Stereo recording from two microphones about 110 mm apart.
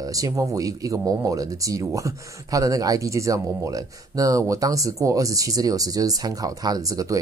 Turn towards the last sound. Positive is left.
turn(degrees=-30)  # may be behind; listen again after turning